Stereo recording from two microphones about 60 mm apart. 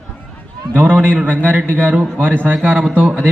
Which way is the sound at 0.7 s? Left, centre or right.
Right.